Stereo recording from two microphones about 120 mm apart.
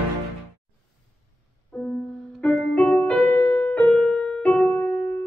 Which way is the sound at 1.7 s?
10° left (ahead or behind).